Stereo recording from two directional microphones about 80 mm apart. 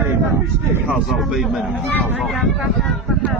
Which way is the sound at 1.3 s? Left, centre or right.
Centre.